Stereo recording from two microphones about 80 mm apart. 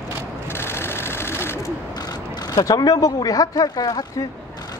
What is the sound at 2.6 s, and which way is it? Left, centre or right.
Speech, left.